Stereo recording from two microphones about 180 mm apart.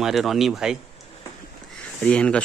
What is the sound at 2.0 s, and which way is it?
Speech, 5° left (ahead or behind).